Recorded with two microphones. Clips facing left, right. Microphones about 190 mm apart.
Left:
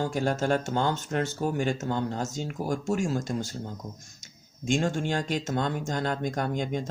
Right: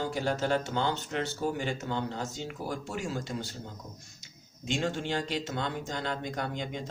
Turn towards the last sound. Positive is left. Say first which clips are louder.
# left 6 dB
turn(degrees=45)  # may be behind; listen again after turning